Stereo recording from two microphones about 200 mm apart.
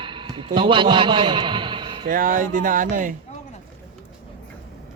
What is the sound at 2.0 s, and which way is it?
A man's voice, 45° right (ahead or behind).